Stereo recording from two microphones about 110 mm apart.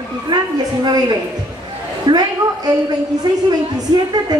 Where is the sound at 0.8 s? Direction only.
40° right (ahead or behind).